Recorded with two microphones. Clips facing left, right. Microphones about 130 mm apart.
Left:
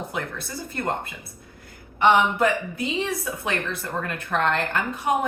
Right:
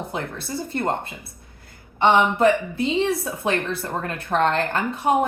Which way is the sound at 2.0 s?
30° right (ahead or behind).